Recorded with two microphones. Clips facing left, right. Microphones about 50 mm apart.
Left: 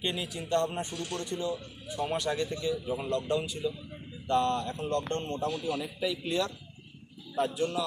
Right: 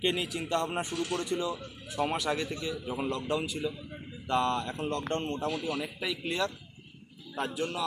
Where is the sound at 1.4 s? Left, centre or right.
Right.